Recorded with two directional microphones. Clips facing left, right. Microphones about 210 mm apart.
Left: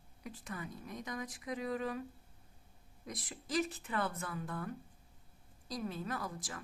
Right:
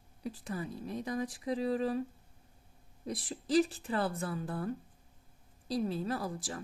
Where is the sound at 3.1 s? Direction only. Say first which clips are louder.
Right 8 dB; 30° right (ahead or behind).